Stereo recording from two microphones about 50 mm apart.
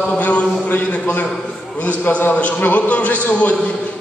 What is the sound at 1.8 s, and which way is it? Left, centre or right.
A man's voice, left.